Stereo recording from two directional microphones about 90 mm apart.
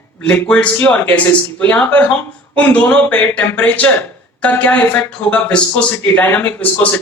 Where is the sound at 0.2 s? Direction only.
15° left (ahead or behind).